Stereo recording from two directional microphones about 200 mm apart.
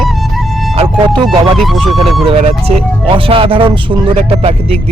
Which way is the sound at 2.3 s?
30° right (ahead or behind).